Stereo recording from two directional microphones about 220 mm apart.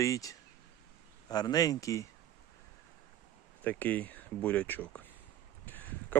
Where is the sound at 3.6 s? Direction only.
5° left (ahead or behind).